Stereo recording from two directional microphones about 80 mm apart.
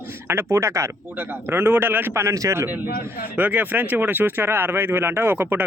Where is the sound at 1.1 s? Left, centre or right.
Right.